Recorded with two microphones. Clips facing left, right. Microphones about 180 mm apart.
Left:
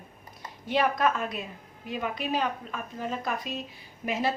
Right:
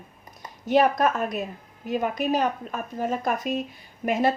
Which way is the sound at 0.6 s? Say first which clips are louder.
Right 5 dB; 45° right (ahead or behind).